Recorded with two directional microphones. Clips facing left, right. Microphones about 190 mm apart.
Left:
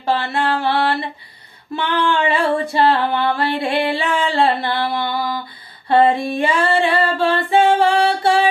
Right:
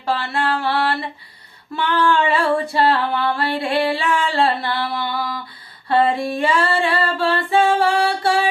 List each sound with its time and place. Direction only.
0.2 s music: 20° left (ahead or behind)
6.3 s singing: 20° left (ahead or behind)
8.0 s music: 20° left (ahead or behind)